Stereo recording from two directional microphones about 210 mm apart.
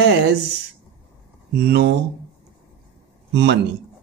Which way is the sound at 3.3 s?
55° right (ahead or behind).